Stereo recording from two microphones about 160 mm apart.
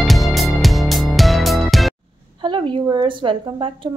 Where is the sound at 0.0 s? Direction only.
Centre (ahead or behind).